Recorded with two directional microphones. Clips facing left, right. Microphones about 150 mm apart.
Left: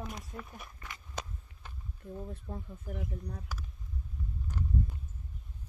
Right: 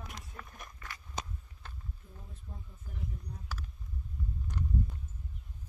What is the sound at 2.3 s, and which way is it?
Speech, 75° left (ahead or behind).